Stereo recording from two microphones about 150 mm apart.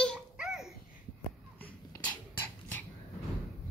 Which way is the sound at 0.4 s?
5° right (ahead or behind).